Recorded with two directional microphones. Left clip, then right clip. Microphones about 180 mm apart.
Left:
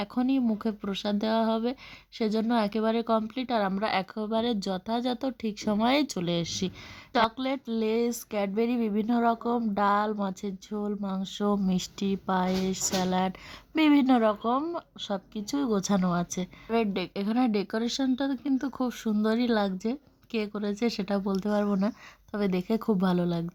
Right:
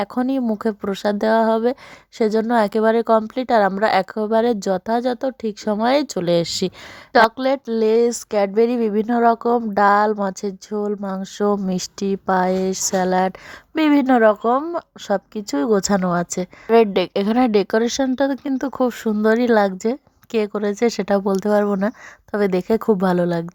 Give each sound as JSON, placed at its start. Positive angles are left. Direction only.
{"t": 0.0, "sound": "speech", "side_deg": -35}
{"t": 15.0, "sound": "speech", "side_deg": -30}
{"t": 16.7, "sound": "speech", "side_deg": -45}